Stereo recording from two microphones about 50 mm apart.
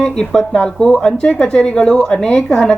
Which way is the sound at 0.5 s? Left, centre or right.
Left.